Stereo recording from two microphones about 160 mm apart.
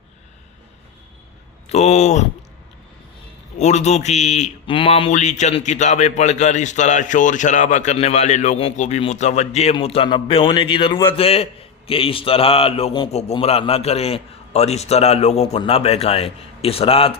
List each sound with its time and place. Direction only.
1.7 s speech: 45° left (ahead or behind)
3.6 s a man's voice: 45° left (ahead or behind)